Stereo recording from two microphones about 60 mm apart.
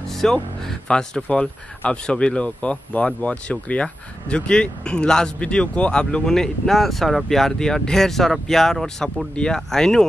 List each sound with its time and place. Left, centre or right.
0.1 s speech: centre